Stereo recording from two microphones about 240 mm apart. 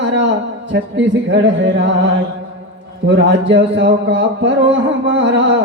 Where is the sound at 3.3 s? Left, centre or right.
Right.